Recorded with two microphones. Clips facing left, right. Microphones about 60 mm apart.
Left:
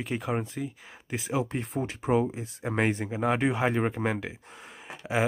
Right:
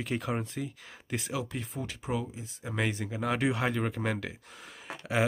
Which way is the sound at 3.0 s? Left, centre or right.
Left.